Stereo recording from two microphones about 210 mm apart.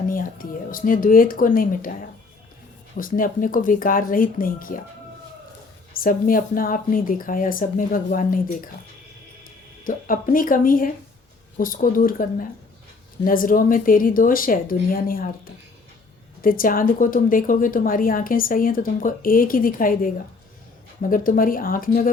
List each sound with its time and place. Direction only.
0.1 s a woman's voice: 40° left (ahead or behind)
6.0 s a woman's voice: 40° left (ahead or behind)
9.8 s a woman's voice: 40° left (ahead or behind)
16.4 s a woman's voice: 40° left (ahead or behind)